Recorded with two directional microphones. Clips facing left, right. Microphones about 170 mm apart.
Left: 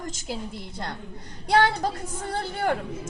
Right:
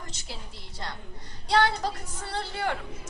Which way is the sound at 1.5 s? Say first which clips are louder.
Left 3 dB; 50° left (ahead or behind).